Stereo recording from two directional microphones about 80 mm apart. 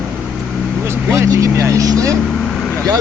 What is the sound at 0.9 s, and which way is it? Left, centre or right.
Speech, right.